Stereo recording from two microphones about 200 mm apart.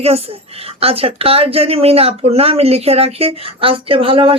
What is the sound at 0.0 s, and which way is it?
A woman's voice, 30° right (ahead or behind).